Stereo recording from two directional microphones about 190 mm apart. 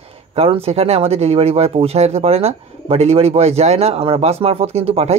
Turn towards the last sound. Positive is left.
turn(degrees=-30)  # may be behind; listen again after turning